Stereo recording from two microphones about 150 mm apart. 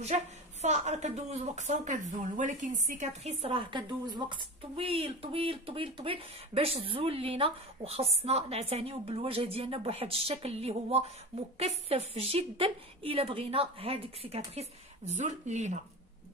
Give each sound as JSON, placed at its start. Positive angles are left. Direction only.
{"t": 0.0, "sound": "a woman's voice", "side_deg": -50}